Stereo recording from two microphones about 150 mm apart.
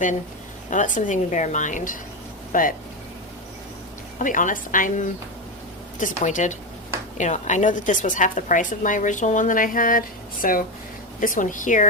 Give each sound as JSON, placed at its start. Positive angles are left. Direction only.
{"t": 0.7, "sound": "a woman's voice", "side_deg": 55}
{"t": 4.2, "sound": "a woman's voice", "side_deg": 60}